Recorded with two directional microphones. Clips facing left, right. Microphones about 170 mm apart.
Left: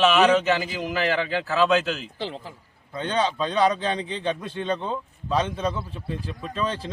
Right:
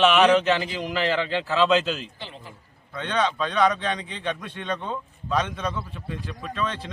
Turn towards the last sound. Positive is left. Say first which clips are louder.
# left 1 dB
turn(degrees=30)  # may be behind; listen again after turning